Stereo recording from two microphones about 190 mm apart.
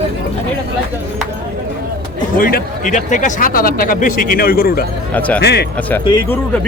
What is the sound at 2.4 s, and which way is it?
A man's voice, 50° left (ahead or behind).